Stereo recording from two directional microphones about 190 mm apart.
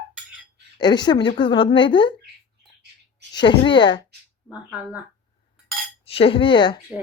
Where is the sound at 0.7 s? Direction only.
20° left (ahead or behind).